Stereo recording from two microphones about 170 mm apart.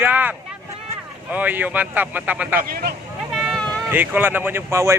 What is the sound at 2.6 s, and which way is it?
Speech, 65° right (ahead or behind).